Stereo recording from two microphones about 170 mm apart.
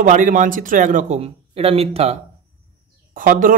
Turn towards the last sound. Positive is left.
turn(degrees=-50)  # may be behind; listen again after turning